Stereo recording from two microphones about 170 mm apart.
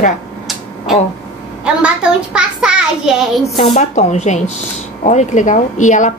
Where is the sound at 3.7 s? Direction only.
45° left (ahead or behind).